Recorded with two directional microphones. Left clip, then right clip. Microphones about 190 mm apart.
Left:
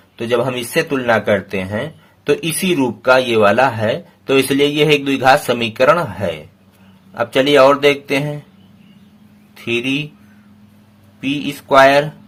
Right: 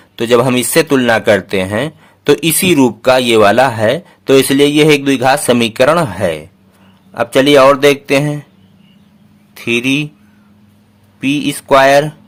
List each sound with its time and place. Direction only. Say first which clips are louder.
0.2 s speech: right 7 dB; 40° right (ahead or behind)
9.6 s speech: right 5 dB; 30° right (ahead or behind)
11.2 s speech: right 6 dB; 35° right (ahead or behind)